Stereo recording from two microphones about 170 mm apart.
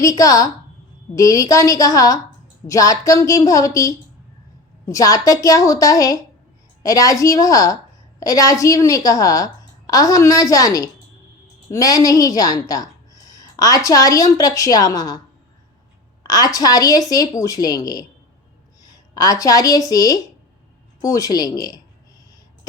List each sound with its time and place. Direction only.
0.0 s a woman's voice: 20° left (ahead or behind)
16.2 s a woman's voice: 20° left (ahead or behind)